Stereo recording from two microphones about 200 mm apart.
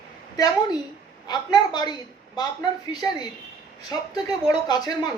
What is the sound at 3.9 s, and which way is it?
A man's voice, 20° left (ahead or behind).